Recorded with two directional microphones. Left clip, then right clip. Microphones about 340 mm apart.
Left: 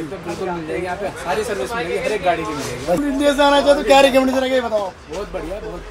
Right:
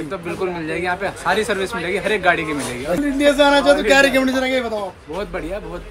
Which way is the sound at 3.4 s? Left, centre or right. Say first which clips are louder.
Left 1 dB; centre.